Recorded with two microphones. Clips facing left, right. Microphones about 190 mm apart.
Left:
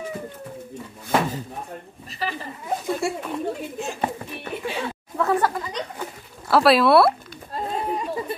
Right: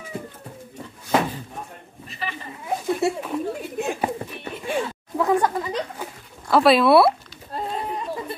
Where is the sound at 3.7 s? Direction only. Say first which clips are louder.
Right 4 dB; 55° right (ahead or behind).